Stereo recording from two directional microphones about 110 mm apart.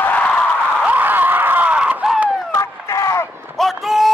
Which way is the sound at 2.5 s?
25° left (ahead or behind).